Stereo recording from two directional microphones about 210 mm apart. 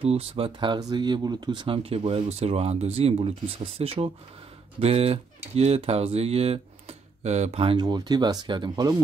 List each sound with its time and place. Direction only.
0.0 s speech: 25° right (ahead or behind)